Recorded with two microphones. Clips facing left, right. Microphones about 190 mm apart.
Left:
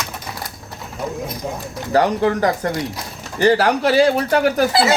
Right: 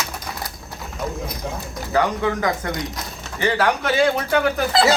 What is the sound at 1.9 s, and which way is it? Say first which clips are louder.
Speech: left 4 dB; 35° left (ahead or behind).